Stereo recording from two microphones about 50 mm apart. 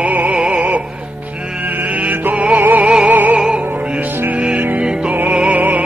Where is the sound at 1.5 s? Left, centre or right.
Right.